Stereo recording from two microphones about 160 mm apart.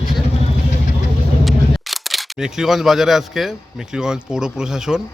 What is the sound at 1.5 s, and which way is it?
Speech, centre (ahead or behind).